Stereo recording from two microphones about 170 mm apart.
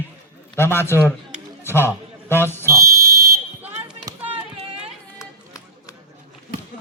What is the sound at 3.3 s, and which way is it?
Fire alarm, 10° right (ahead or behind).